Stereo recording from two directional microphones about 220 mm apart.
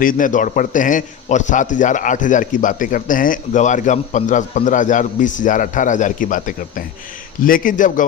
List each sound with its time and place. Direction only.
0.0 s a man's voice: 35° left (ahead or behind)